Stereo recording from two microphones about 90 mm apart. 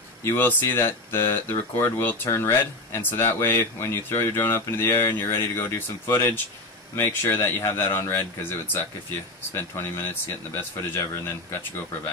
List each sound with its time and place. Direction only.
0.2 s speech: 25° left (ahead or behind)